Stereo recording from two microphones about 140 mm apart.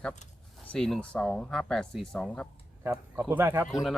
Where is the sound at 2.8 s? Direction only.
15° right (ahead or behind).